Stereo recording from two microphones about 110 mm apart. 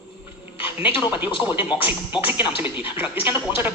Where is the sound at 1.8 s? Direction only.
15° right (ahead or behind).